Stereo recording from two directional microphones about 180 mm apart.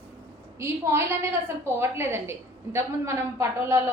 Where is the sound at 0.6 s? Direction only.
15° right (ahead or behind).